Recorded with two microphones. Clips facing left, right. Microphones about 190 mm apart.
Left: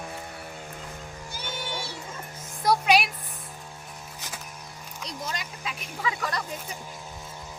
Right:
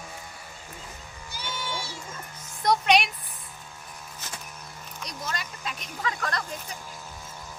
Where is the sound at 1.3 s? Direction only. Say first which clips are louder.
Right 1 dB; 55° left (ahead or behind).